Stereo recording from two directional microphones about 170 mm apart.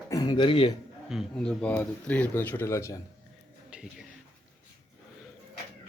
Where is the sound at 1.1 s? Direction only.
Centre (ahead or behind); by 3.0 s 15° left (ahead or behind).